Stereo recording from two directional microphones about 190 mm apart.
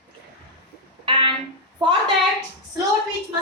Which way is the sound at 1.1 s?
25° right (ahead or behind).